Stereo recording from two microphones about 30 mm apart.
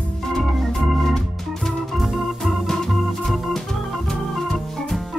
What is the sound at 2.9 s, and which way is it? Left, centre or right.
Organ, centre.